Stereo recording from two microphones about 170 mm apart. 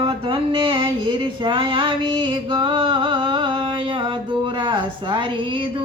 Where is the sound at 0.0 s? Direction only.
30° right (ahead or behind).